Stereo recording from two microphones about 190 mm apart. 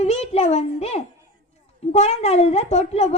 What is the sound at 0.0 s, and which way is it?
A child's voice, 35° left (ahead or behind).